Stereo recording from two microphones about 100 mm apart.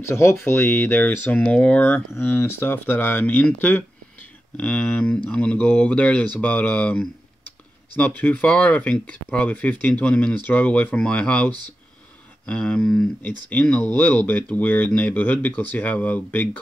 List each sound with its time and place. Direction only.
0.1 s speech: 30° left (ahead or behind)